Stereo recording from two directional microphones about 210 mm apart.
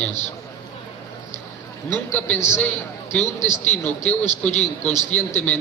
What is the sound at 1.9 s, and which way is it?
A man's voice, 10° left (ahead or behind).